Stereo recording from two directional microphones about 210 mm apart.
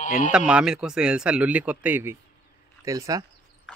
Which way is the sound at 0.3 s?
5° right (ahead or behind).